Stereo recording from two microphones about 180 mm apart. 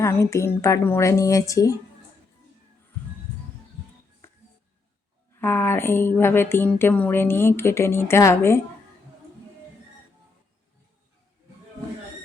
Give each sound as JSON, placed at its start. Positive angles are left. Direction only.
{"t": 0.0, "sound": "speech", "side_deg": 15}
{"t": 4.2, "sound": "music", "side_deg": 15}
{"t": 5.4, "sound": "speech", "side_deg": 10}